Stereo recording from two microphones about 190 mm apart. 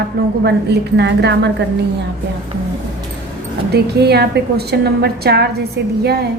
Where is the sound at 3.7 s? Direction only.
60° right (ahead or behind).